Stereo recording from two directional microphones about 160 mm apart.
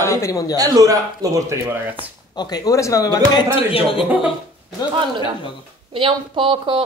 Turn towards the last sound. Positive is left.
turn(degrees=-30)  # may be behind; listen again after turning